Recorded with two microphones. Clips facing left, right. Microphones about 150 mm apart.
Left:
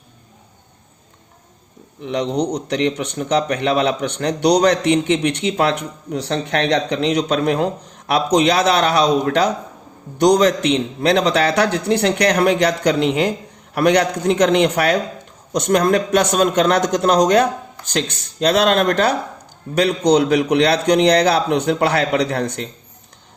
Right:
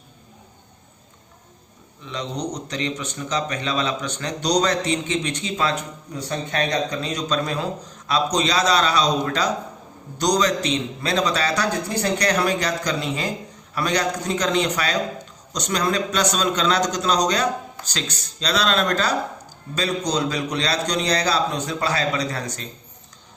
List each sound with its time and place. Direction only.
2.0 s a man's voice: 65° left (ahead or behind)